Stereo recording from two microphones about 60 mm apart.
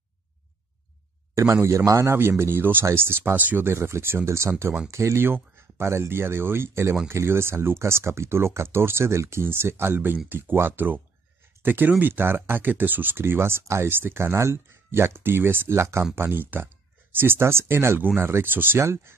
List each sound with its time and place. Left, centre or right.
1.3 s speech: right
3.7 s speech: right
9.9 s speech: right
16.2 s speech: right
18.8 s speech: right